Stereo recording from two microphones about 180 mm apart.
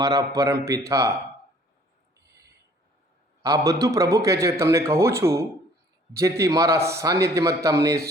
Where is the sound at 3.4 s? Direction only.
15° right (ahead or behind).